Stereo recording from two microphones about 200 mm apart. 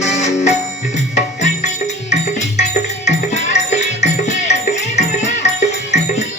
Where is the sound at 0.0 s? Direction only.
35° left (ahead or behind).